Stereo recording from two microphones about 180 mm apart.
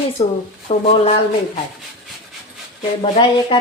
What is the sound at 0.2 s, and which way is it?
Speech, 30° left (ahead or behind).